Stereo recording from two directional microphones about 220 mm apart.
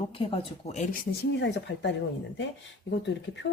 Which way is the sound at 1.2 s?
50° left (ahead or behind).